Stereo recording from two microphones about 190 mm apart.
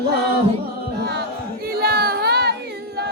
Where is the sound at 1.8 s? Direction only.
55° right (ahead or behind).